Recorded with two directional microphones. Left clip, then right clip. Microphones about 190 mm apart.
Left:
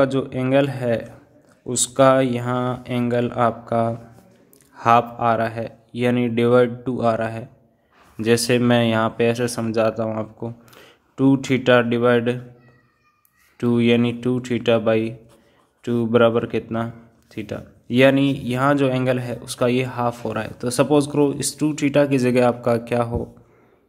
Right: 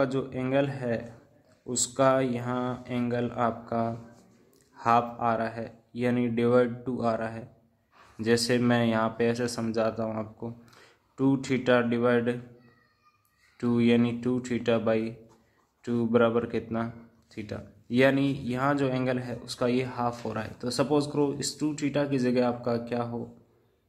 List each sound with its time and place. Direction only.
0.0 s speech: 25° left (ahead or behind)
13.6 s speech: 20° left (ahead or behind); by 23.2 s 35° left (ahead or behind)